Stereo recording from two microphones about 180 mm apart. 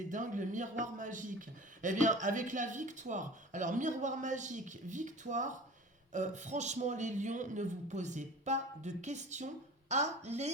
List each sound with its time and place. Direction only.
0.1 s a man's voice: 45° right (ahead or behind)